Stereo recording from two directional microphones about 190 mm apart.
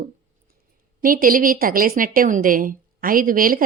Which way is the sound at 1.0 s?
45° right (ahead or behind).